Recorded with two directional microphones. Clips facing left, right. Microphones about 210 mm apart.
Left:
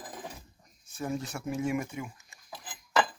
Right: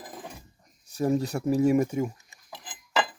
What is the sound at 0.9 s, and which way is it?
Speech, 40° right (ahead or behind).